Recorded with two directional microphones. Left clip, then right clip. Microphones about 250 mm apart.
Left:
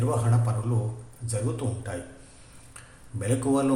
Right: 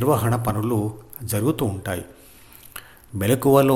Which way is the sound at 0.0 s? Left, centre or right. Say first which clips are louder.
Right 8 dB; right.